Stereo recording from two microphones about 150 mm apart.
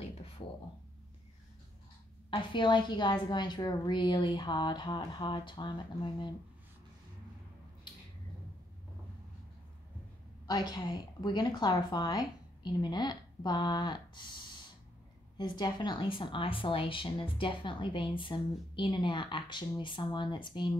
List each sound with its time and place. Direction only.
2.3 s speech: 30° left (ahead or behind)
10.4 s a woman's voice: 25° left (ahead or behind)
15.3 s speech: 30° left (ahead or behind)